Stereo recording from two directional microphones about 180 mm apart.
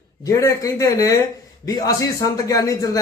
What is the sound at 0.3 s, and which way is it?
A man's voice, 20° left (ahead or behind).